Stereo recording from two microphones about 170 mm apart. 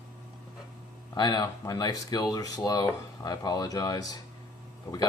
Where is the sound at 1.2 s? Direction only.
25° left (ahead or behind).